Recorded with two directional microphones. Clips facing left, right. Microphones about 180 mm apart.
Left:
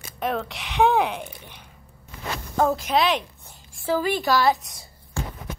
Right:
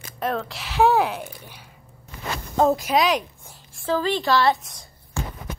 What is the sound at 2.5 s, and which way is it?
Speech, 20° right (ahead or behind).